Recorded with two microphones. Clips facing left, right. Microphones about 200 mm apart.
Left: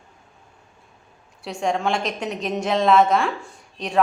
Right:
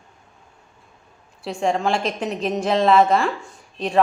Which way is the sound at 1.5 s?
5° right (ahead or behind).